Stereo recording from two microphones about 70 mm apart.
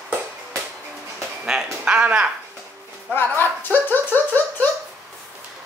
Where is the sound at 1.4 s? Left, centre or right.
Centre.